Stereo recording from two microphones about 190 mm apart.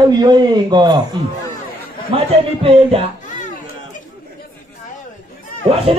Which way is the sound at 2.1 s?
30° right (ahead or behind).